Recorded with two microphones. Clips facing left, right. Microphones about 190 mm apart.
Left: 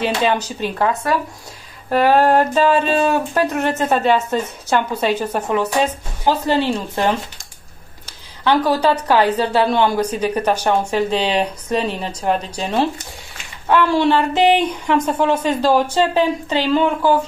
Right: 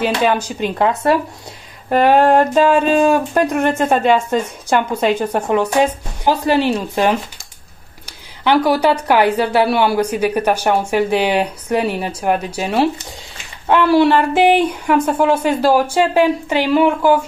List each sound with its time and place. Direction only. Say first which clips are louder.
0.0 s a woman's voice: right 2 dB; 10° right (ahead or behind)
8.5 s a woman's voice: right 2 dB; 10° right (ahead or behind)